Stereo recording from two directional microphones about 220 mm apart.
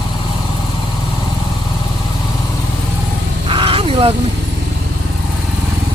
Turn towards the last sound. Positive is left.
turn(degrees=-25)  # may be behind; listen again after turning